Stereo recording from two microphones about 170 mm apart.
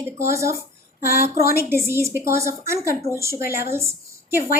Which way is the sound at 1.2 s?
15° right (ahead or behind).